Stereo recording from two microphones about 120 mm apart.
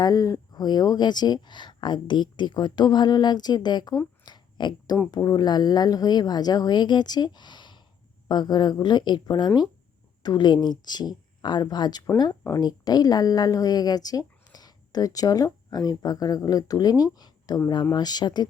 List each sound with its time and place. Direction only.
0.0 s a woman's voice: 30° left (ahead or behind)